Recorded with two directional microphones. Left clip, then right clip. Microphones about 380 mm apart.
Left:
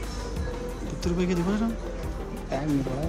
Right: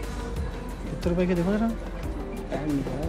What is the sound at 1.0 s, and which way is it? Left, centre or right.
Speech, centre.